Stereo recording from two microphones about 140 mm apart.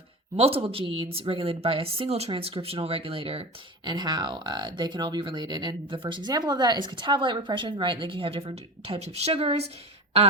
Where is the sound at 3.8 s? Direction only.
30° right (ahead or behind).